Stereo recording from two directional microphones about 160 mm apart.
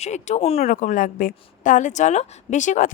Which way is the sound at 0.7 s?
55° left (ahead or behind).